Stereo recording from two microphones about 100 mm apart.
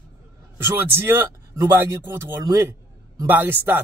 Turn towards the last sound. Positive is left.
turn(degrees=-20)  # may be behind; listen again after turning